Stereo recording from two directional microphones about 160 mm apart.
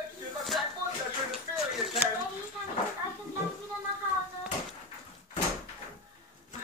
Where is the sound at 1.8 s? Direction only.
Centre (ahead or behind).